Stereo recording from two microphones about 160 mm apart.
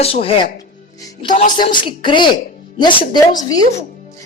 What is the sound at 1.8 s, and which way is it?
A woman's voice, 30° left (ahead or behind).